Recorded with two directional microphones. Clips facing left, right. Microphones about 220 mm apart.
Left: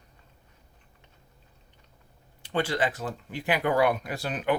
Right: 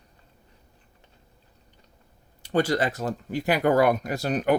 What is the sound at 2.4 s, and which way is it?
Speech, 40° right (ahead or behind).